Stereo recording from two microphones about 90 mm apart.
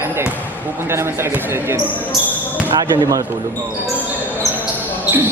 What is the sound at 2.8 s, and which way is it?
Speech, 45° right (ahead or behind).